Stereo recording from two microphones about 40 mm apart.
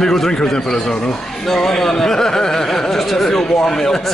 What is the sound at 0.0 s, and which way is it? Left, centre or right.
A man's voice, centre.